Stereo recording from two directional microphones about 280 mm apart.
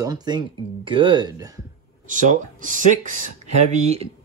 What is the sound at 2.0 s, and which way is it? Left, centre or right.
Speech, right.